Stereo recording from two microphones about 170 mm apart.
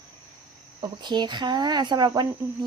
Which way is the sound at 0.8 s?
25° right (ahead or behind).